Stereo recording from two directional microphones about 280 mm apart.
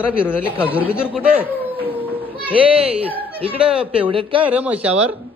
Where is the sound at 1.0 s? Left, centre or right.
Centre.